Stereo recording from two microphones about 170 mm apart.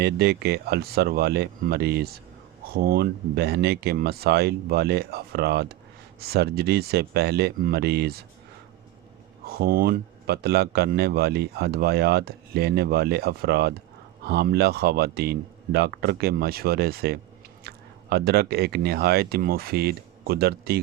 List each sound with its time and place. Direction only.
0.0 s speech: 70° right (ahead or behind)
9.5 s speech: 60° right (ahead or behind)